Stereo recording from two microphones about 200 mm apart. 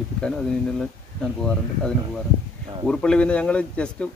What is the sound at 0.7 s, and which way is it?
Speech, 5° left (ahead or behind).